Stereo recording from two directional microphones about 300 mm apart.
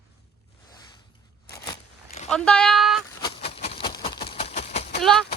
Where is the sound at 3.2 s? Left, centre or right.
Centre.